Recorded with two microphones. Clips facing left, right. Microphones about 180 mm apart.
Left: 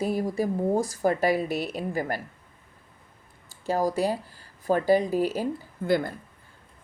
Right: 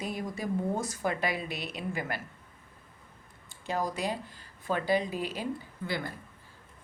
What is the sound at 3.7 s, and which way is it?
Speech, 35° left (ahead or behind).